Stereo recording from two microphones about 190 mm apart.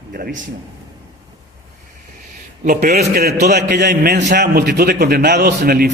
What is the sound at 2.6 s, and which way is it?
Speech, 40° right (ahead or behind).